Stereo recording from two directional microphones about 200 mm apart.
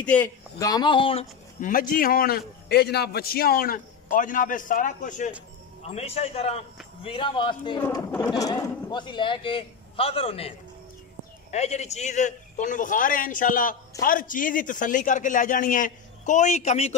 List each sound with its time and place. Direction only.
0.0 s speech: 5° left (ahead or behind); by 1.2 s 25° left (ahead or behind)
1.6 s a man's voice: 45° left (ahead or behind)
11.5 s a man's voice: 35° left (ahead or behind)